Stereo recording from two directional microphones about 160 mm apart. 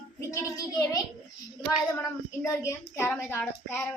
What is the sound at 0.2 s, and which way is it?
A child's voice, 20° left (ahead or behind).